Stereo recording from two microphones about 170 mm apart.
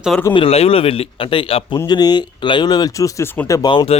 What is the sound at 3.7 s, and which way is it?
Speech, 30° left (ahead or behind).